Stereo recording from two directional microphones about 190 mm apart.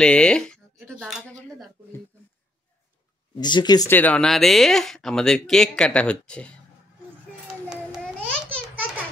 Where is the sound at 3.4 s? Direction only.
25° left (ahead or behind); by 6.5 s 5° left (ahead or behind).